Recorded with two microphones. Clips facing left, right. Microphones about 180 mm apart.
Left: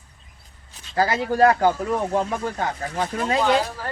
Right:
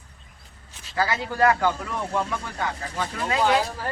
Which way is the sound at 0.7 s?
40° left (ahead or behind).